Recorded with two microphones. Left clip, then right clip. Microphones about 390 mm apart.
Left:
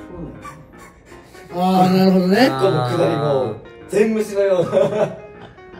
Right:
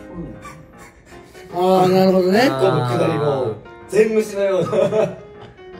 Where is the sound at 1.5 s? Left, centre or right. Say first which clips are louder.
Right 2 dB; centre.